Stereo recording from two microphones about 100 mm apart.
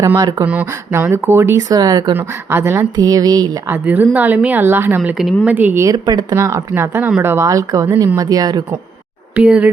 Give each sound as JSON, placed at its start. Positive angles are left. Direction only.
{"t": 0.0, "sound": "speech", "side_deg": -35}
{"t": 0.4, "sound": "speech", "side_deg": -15}
{"t": 1.5, "sound": "speech", "side_deg": -40}
{"t": 2.1, "sound": "speech", "side_deg": -20}
{"t": 2.9, "sound": "speech", "side_deg": -40}
{"t": 3.7, "sound": "a woman's voice", "side_deg": -15}
{"t": 4.9, "sound": "a woman's voice", "side_deg": -5}
{"t": 5.8, "sound": "speech", "side_deg": -40}
{"t": 6.3, "sound": "speech", "side_deg": -30}
{"t": 9.3, "sound": "speech", "side_deg": -10}